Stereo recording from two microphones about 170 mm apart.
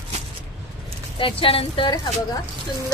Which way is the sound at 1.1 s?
30° left (ahead or behind).